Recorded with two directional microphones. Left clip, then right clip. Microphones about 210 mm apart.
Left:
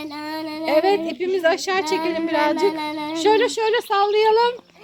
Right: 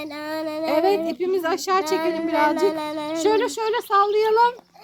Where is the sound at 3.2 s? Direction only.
60° right (ahead or behind).